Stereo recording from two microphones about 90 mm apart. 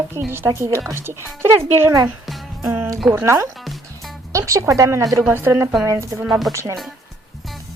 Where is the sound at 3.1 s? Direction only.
30° right (ahead or behind).